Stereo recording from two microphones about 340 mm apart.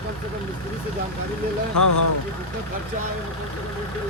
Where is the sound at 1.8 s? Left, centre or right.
Left.